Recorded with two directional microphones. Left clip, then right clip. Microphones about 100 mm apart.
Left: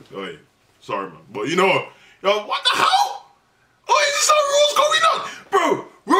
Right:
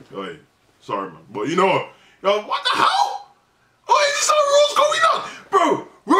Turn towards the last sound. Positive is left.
turn(degrees=0)  # may be behind; listen again after turning